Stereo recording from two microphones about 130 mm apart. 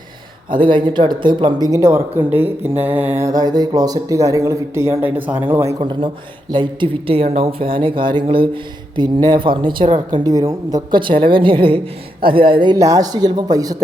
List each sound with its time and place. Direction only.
0.5 s speech: 40° right (ahead or behind); by 3.2 s 15° right (ahead or behind)
3.2 s speech: 30° right (ahead or behind)
5.8 s speech: 40° right (ahead or behind)
12.8 s speech: 25° right (ahead or behind)